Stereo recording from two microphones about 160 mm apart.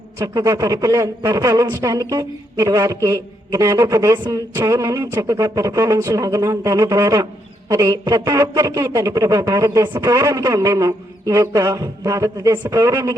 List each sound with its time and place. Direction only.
0.2 s a man's voice: 20° right (ahead or behind)